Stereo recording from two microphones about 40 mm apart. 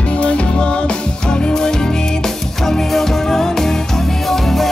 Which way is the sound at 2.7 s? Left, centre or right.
Centre.